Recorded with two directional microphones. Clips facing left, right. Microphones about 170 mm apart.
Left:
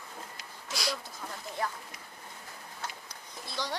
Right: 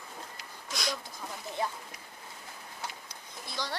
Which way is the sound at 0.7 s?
5° left (ahead or behind).